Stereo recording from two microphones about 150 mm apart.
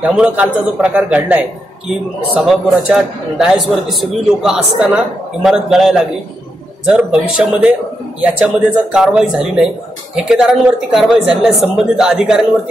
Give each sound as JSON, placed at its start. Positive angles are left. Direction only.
{"t": 0.0, "sound": "a man's voice", "side_deg": -10}
{"t": 8.9, "sound": "a man's voice", "side_deg": -5}